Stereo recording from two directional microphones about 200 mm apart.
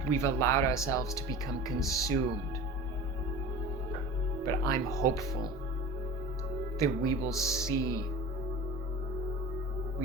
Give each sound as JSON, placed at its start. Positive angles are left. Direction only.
{"t": 0.1, "sound": "speech", "side_deg": 15}
{"t": 4.4, "sound": "speech", "side_deg": 15}
{"t": 6.7, "sound": "speech", "side_deg": 15}